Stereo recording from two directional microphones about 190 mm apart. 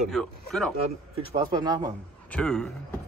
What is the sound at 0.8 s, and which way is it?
Speech, 25° right (ahead or behind).